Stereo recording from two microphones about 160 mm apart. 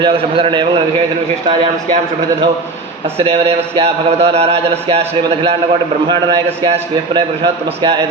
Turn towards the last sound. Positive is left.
turn(degrees=-40)  # may be behind; listen again after turning